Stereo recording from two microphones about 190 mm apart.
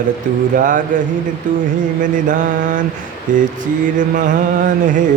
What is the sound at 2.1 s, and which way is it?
Mantra, 45° right (ahead or behind).